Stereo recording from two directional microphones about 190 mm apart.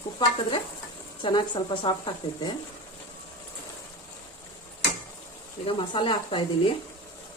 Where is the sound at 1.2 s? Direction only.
25° left (ahead or behind).